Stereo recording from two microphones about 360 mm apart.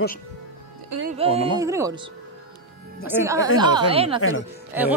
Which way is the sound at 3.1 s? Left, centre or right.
Centre.